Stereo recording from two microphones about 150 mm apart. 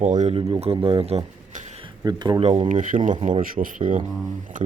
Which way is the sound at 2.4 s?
45° right (ahead or behind).